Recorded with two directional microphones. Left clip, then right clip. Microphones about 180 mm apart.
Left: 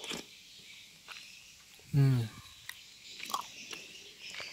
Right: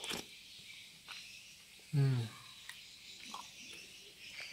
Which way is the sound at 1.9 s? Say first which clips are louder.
Left 6 dB; 40° left (ahead or behind).